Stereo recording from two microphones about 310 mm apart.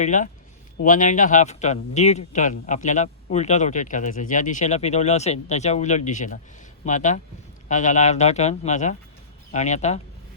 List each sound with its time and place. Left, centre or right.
0.0 s speech: left